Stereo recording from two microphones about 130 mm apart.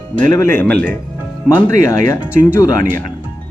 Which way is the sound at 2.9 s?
90° right.